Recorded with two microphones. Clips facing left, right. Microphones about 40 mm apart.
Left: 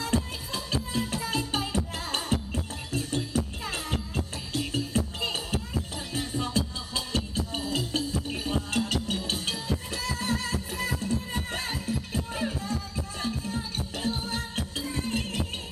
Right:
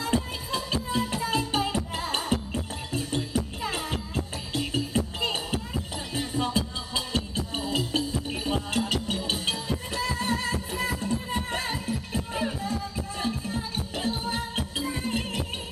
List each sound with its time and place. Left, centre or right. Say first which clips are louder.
0.0 s music: right 2 dB; centre